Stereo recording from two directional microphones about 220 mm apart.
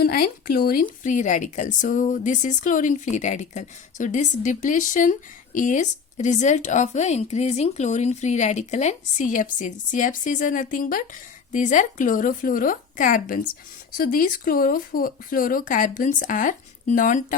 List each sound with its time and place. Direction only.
0.0 s a woman's voice: 45° left (ahead or behind)